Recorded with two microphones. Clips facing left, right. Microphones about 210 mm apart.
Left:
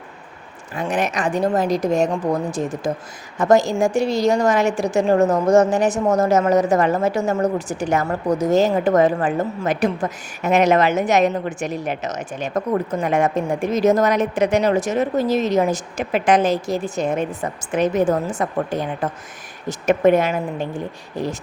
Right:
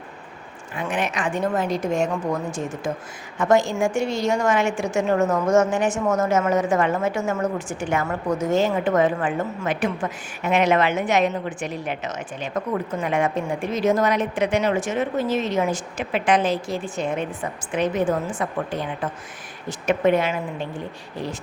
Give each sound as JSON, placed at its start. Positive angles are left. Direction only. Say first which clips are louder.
{"t": 0.8, "sound": "a woman's voice", "louder": "left 4 dB", "side_deg": 40}